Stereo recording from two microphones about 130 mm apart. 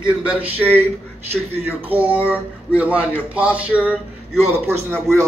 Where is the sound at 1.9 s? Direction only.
10° right (ahead or behind).